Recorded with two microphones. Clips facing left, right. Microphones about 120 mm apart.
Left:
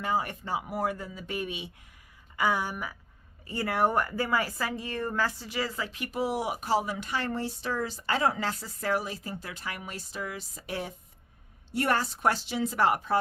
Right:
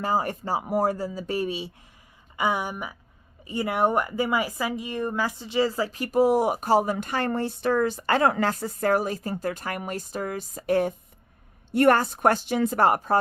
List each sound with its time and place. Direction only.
0.0 s speech: 40° right (ahead or behind)
2.3 s a woman's voice: 20° right (ahead or behind); by 13.1 s 45° right (ahead or behind)